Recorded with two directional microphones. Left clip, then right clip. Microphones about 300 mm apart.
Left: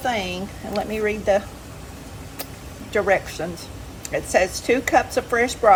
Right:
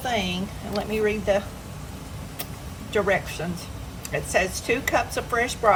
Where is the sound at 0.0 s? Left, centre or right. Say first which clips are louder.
Left 2 dB; centre.